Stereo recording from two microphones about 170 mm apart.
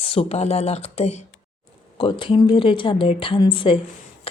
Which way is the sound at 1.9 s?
30° left (ahead or behind).